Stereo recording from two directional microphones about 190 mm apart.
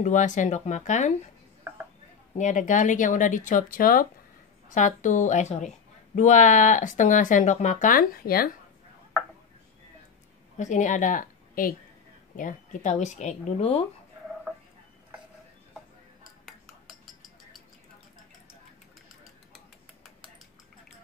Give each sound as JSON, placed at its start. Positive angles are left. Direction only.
{"t": 0.0, "sound": "speech", "side_deg": 40}
{"t": 2.3, "sound": "speech", "side_deg": 40}
{"t": 10.6, "sound": "a woman's voice", "side_deg": 40}
{"t": 16.4, "sound": "cutlery", "side_deg": 0}